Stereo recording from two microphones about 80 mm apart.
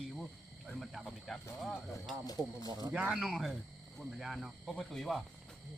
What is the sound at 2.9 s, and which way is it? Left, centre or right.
Speech, centre.